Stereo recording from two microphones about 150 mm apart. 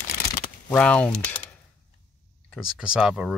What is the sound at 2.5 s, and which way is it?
Speech, 5° right (ahead or behind).